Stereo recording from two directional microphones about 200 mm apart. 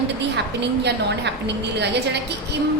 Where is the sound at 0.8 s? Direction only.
60° right (ahead or behind).